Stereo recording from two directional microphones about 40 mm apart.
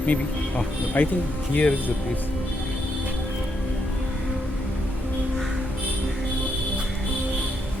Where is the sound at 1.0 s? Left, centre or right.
Left.